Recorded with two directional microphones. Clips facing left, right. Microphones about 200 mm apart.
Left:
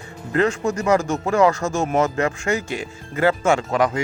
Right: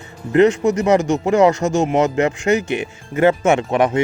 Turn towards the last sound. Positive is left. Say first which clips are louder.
# right 3 dB
turn(degrees=-25)  # may be behind; listen again after turning